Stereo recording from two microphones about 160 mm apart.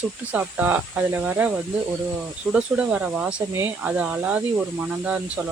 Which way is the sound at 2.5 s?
10° right (ahead or behind).